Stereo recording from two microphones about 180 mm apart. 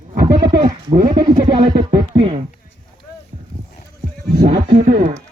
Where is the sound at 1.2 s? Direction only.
30° right (ahead or behind).